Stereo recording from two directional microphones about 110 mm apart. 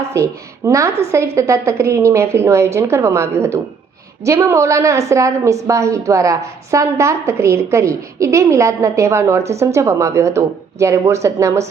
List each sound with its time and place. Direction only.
0.1 s a woman's voice: 25° right (ahead or behind)